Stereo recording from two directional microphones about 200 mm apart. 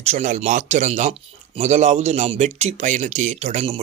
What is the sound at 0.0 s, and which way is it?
Speech, 35° right (ahead or behind).